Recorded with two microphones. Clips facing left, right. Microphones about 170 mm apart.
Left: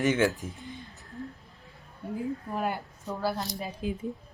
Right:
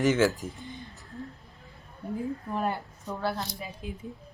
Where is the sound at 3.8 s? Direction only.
90° left.